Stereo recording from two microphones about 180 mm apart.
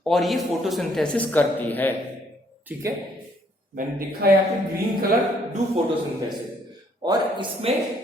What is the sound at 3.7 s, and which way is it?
Speech, 60° right (ahead or behind).